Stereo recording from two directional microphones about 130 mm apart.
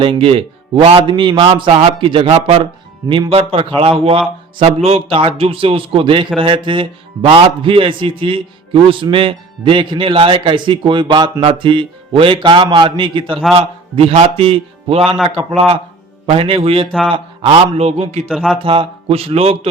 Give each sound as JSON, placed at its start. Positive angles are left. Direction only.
{"t": 0.0, "sound": "a man's voice", "side_deg": -45}
{"t": 18.3, "sound": "speech", "side_deg": 0}
{"t": 18.5, "sound": "a man's voice", "side_deg": -45}